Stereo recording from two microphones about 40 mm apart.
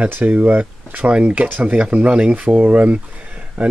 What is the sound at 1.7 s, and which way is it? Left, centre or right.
Speech, right.